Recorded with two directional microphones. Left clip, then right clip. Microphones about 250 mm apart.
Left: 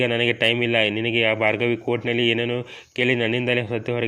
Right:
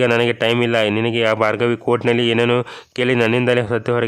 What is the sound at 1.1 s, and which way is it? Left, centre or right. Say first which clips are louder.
Speech: right 2 dB; centre.